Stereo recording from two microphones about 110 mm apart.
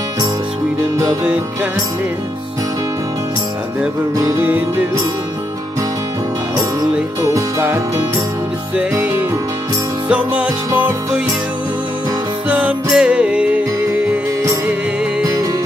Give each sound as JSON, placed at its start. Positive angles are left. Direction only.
{"t": 1.2, "sound": "music", "side_deg": -10}
{"t": 4.4, "sound": "music", "side_deg": -15}
{"t": 7.2, "sound": "music", "side_deg": -30}
{"t": 10.0, "sound": "music", "side_deg": -10}
{"t": 12.4, "sound": "music", "side_deg": -15}
{"t": 15.2, "sound": "music", "side_deg": -30}